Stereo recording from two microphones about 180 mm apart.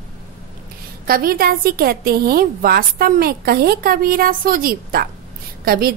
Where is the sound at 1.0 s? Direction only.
55° right (ahead or behind).